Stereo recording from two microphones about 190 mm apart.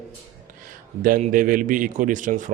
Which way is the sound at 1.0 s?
45° right (ahead or behind).